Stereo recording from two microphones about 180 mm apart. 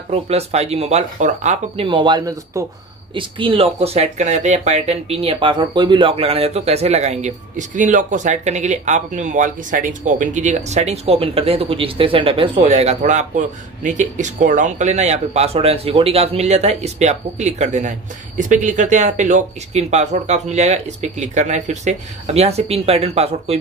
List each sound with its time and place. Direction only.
0.1 s speech: 35° right (ahead or behind)
1.9 s speech: 25° right (ahead or behind)